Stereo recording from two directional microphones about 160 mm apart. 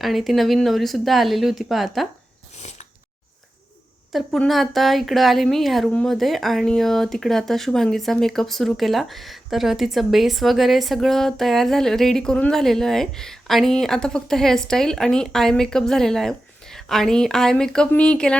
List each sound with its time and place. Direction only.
0.0 s speech: centre (ahead or behind)
2.6 s a sound: 45° left (ahead or behind)
4.1 s speech: centre (ahead or behind)